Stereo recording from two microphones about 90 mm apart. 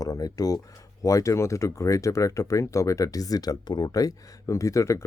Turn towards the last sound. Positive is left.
turn(degrees=35)  # may be behind; listen again after turning